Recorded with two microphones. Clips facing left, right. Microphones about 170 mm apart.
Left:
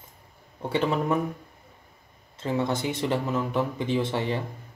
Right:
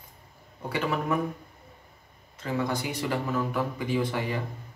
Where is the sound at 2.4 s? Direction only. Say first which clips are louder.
Left 3 dB; 25° left (ahead or behind).